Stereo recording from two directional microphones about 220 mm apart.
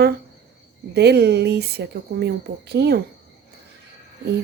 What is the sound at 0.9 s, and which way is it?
A woman's voice, 50° right (ahead or behind).